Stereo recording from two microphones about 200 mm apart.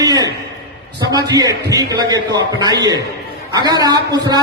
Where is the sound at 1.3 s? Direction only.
15° right (ahead or behind).